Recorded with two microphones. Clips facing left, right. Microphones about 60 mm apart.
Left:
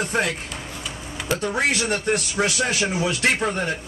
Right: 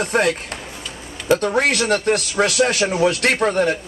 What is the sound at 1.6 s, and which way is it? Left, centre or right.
A man's voice, right.